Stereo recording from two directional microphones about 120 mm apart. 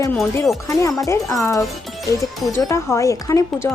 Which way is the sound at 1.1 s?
25° left (ahead or behind).